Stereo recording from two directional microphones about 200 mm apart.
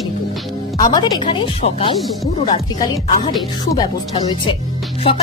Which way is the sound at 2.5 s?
20° left (ahead or behind).